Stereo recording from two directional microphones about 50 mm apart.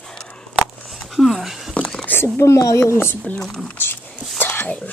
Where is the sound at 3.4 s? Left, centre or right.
Centre.